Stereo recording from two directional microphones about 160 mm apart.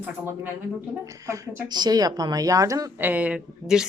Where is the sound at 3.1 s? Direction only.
10° right (ahead or behind).